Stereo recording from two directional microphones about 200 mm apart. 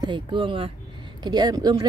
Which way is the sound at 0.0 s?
25° right (ahead or behind).